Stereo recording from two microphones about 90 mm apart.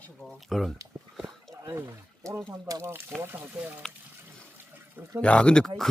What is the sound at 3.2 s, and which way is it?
Speech, 20° right (ahead or behind).